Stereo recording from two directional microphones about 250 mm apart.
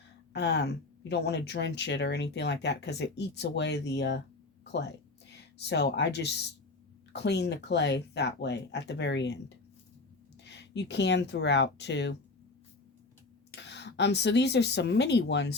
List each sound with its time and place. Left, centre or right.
0.3 s speech: left
5.5 s speech: left
10.4 s speech: left
13.6 s speech: left